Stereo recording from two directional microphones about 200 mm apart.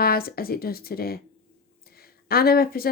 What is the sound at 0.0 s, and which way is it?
Speech, 50° left (ahead or behind).